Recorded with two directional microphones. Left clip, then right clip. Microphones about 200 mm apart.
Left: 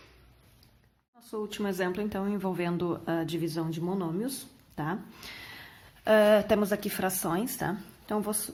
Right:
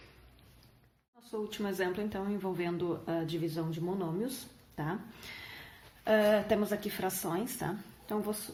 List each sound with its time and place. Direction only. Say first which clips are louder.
1.2 s speech: left 3 dB; 35° left (ahead or behind)